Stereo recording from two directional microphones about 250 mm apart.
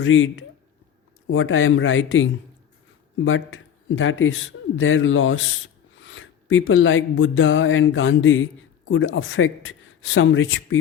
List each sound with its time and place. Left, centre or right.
0.0 s a man's voice: left